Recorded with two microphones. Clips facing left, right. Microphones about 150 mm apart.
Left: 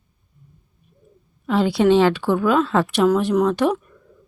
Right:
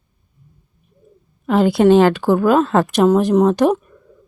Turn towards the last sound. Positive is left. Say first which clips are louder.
# right 4 dB
turn(degrees=-40)  # may be behind; listen again after turning